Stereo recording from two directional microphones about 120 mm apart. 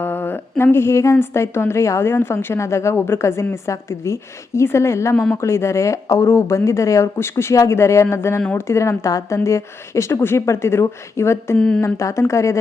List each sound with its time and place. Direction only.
0.0 s a woman's voice: 15° left (ahead or behind)
11.5 s speech: 5° left (ahead or behind)
11.9 s a woman's voice: 25° left (ahead or behind)